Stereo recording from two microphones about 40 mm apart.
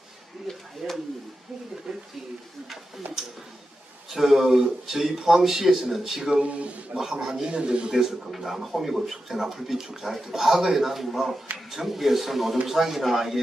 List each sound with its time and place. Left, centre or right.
0.5 s speech: centre
0.8 s speech: centre
1.9 s a man's voice: centre
4.1 s a man's voice: centre
6.4 s a man's voice: right
6.9 s speech: centre
7.9 s a man's voice: centre